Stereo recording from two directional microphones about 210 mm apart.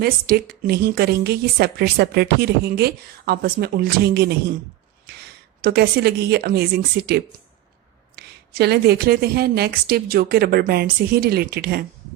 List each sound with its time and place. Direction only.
0.0 s a woman's voice: 45° right (ahead or behind)
5.6 s a woman's voice: 50° right (ahead or behind)